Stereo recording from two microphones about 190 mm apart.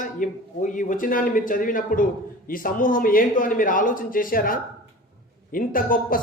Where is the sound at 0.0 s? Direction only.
45° left (ahead or behind).